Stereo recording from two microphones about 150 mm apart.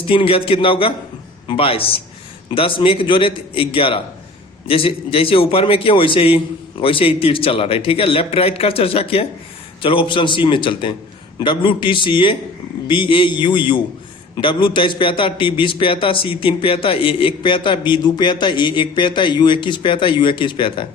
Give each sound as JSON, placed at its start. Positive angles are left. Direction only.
{"t": 0.1, "sound": "a man's voice", "side_deg": 35}